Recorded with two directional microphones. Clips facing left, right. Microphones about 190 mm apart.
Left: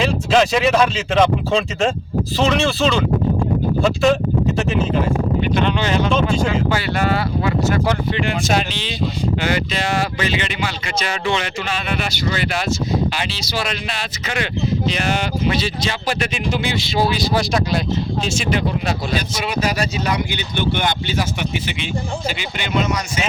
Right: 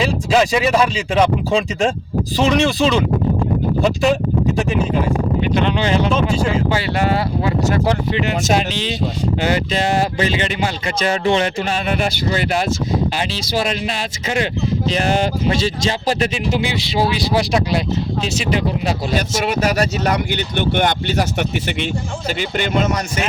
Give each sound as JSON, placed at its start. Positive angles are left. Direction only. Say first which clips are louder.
{"t": 0.0, "sound": "speech", "louder": "even", "side_deg": -5}
{"t": 6.7, "sound": "speech", "louder": "right 1 dB", "side_deg": -25}
{"t": 9.7, "sound": "speech", "louder": "right 3 dB", "side_deg": -40}
{"t": 15.0, "sound": "speech", "louder": "right 3 dB", "side_deg": -35}
{"t": 20.7, "sound": "speech", "louder": "right 4 dB", "side_deg": -60}
{"t": 22.4, "sound": "speech", "louder": "right 6 dB", "side_deg": -45}